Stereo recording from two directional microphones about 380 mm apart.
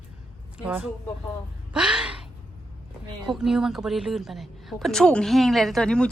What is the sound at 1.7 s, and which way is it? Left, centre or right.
Gasp, centre.